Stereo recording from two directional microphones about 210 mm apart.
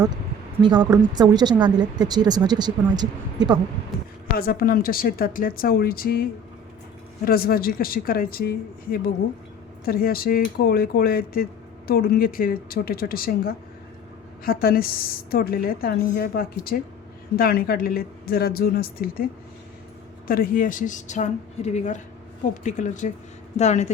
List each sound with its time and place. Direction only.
0.6 s a woman's voice: 20° right (ahead or behind)
4.4 s a woman's voice: 45° left (ahead or behind)
7.3 s a woman's voice: 45° left (ahead or behind)